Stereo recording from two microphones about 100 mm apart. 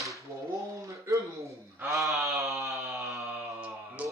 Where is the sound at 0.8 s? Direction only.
30° right (ahead or behind).